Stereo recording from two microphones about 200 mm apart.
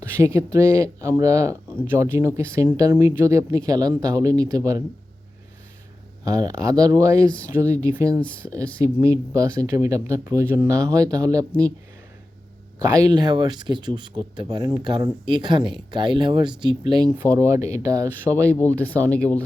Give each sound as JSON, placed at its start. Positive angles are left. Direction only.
{"t": 0.1, "sound": "speech", "side_deg": -15}
{"t": 6.2, "sound": "speech", "side_deg": -20}
{"t": 12.8, "sound": "speech", "side_deg": -15}
{"t": 18.4, "sound": "speech", "side_deg": 10}